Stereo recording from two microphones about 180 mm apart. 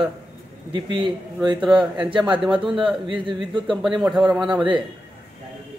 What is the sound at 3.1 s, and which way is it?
Speech, 25° right (ahead or behind).